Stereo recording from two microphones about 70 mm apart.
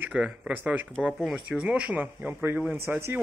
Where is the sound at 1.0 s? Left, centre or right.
Centre.